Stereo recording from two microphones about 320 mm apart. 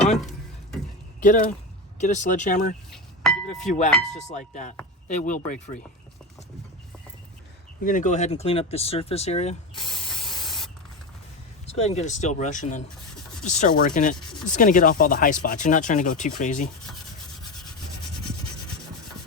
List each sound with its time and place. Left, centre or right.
0.0 s a sound: centre
1.2 s speech: left
3.8 s speech: centre
4.3 s speech: left
7.9 s speech: left
10.2 s spray: centre
11.6 s speech: centre